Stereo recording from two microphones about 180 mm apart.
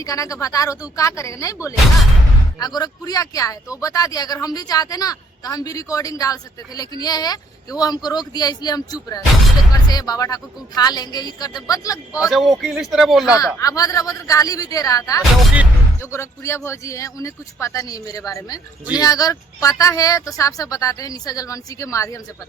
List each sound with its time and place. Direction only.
0.0 s speech: 20° left (ahead or behind)
12.2 s speech: centre (ahead or behind)
13.3 s speech: 20° left (ahead or behind)
15.2 s speech: centre (ahead or behind)
16.0 s speech: 15° left (ahead or behind)